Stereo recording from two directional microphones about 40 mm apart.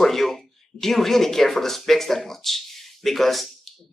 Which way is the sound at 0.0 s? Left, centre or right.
Centre.